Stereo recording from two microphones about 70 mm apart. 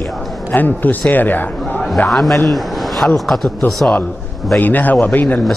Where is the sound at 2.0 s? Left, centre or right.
Centre.